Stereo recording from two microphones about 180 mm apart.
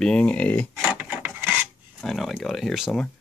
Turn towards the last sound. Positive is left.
turn(degrees=0)  # may be behind; listen again after turning